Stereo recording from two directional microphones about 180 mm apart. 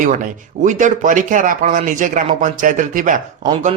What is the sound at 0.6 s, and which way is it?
Speech, 45° right (ahead or behind).